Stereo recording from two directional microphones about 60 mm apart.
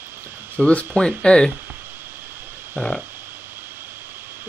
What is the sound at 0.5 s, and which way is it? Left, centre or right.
Speech, centre.